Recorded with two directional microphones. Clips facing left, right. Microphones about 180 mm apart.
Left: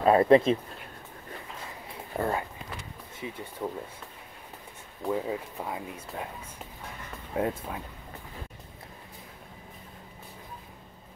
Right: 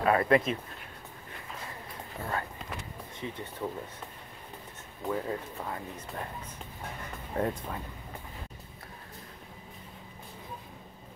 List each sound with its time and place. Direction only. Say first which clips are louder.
0.0 s speech: left 5 dB; 25° left (ahead or behind)
2.1 s speech: left 11 dB; 50° left (ahead or behind)
3.2 s speech: left 1 dB; 10° left (ahead or behind)
5.0 s speech: left 3 dB; 10° left (ahead or behind)